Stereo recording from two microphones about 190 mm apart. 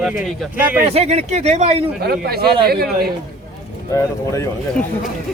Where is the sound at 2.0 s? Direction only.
55° right (ahead or behind).